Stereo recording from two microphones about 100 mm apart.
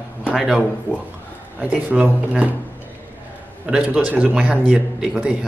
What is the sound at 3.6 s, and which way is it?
Speech, 15° right (ahead or behind).